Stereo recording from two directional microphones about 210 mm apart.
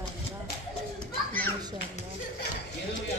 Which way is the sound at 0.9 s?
10° left (ahead or behind).